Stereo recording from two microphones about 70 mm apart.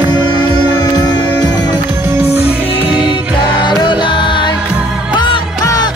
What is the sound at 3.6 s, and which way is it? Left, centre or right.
Music, left.